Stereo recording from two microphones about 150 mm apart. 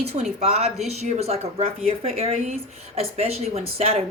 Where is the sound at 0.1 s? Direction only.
45° right (ahead or behind).